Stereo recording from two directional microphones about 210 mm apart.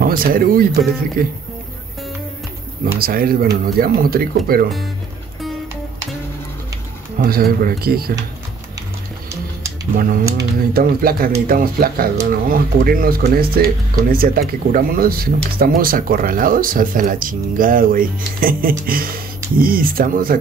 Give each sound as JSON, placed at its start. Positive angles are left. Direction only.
{"t": 0.0, "sound": "speech", "side_deg": -45}
{"t": 3.0, "sound": "speech", "side_deg": -45}
{"t": 7.2, "sound": "speech", "side_deg": -45}
{"t": 9.9, "sound": "speech", "side_deg": -45}